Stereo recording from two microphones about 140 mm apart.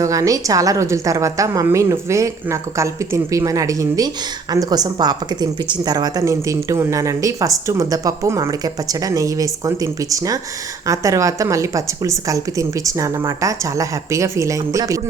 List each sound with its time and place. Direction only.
0.0 s a woman's voice: 25° right (ahead or behind)